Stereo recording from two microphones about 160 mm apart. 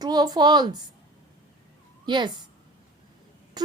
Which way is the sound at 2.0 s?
30° right (ahead or behind).